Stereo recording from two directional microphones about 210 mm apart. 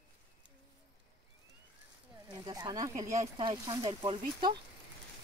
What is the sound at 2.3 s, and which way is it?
Speech, 20° right (ahead or behind).